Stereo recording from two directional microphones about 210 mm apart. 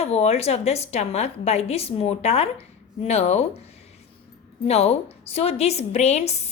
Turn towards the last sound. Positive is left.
turn(degrees=30)  # may be behind; listen again after turning